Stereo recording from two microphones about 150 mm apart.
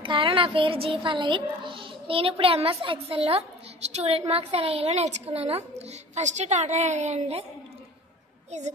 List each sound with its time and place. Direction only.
0.0 s a child's voice: 35° right (ahead or behind)
8.5 s a child's voice: 50° right (ahead or behind)